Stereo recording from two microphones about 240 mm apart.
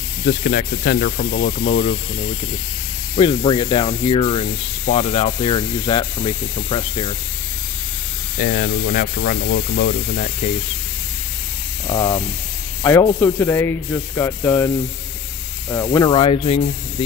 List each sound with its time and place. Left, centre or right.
0.2 s speech: left
3.2 s speech: left
8.4 s speech: left
11.9 s speech: centre
15.7 s speech: centre